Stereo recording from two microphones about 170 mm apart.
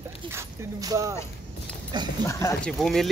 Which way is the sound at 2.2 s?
15° left (ahead or behind).